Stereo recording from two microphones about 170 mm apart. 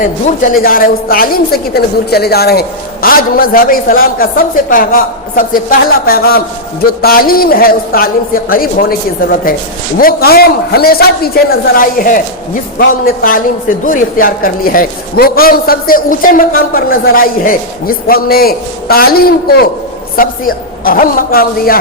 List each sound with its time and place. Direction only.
0.0 s a woman's voice: 55° left (ahead or behind)